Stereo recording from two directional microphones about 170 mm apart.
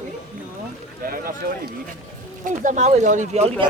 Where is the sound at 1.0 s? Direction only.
60° right (ahead or behind).